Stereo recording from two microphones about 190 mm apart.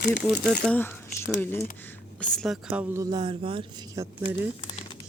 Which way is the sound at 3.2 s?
30° right (ahead or behind).